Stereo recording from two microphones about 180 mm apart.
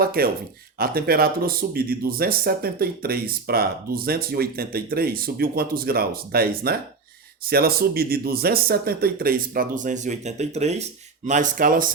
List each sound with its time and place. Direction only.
0.0 s speech: 55° right (ahead or behind)